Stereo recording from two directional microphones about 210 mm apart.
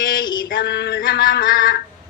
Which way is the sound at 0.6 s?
55° left (ahead or behind).